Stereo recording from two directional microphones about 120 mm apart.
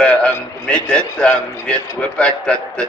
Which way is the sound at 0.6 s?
10° left (ahead or behind).